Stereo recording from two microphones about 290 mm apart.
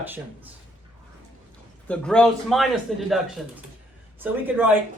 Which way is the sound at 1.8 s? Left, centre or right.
Centre.